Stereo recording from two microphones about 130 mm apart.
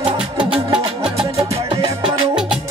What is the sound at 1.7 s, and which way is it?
Music, 40° right (ahead or behind).